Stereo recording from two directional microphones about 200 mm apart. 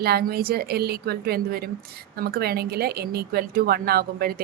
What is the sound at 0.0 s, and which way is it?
A woman's voice, 50° right (ahead or behind).